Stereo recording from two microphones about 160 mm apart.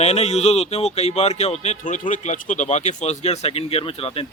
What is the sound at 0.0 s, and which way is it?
Speech, 40° left (ahead or behind).